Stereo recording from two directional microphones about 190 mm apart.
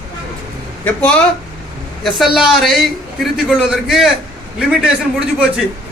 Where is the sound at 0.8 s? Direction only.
5° left (ahead or behind).